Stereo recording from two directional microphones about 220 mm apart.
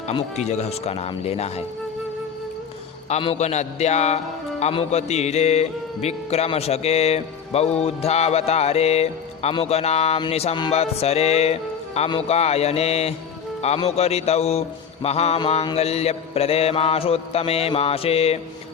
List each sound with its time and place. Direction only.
0.1 s a man's voice: 30° left (ahead or behind)
3.1 s a man's voice: 25° left (ahead or behind)